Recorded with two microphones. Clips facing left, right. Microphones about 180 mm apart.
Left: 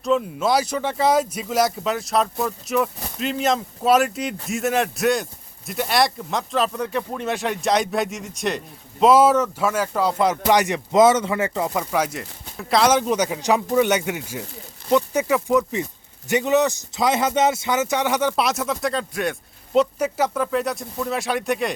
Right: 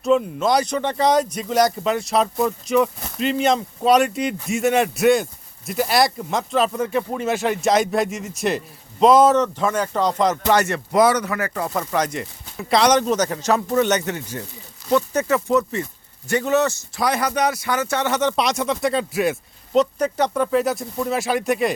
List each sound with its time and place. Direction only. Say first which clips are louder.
0.0 s speech: right 2 dB; centre (ahead or behind); by 11.7 s 20° left (ahead or behind)
11.7 s speech: even; 5° left (ahead or behind)
19.7 s speech: right 1 dB; 5° left (ahead or behind)